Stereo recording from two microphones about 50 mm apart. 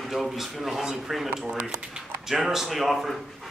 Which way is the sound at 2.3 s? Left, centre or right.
Centre.